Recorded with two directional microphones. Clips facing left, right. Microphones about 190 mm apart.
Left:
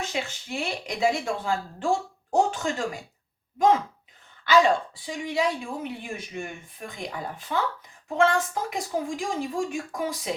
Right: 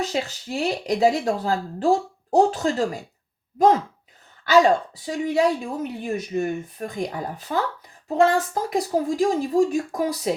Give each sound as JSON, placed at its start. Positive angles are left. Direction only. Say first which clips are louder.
{"t": 0.0, "sound": "speech", "louder": "right 5 dB", "side_deg": -35}
{"t": 4.6, "sound": "speech", "louder": "right 4 dB", "side_deg": -40}